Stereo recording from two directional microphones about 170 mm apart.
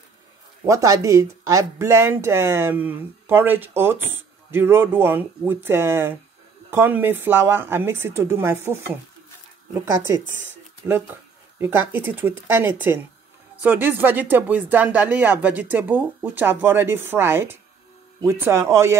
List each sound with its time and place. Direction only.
0.7 s speech: 20° right (ahead or behind)
9.9 s speech: 15° right (ahead or behind)
11.6 s speech: 15° right (ahead or behind)